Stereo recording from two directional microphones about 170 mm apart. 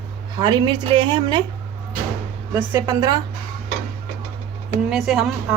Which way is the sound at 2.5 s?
15° right (ahead or behind).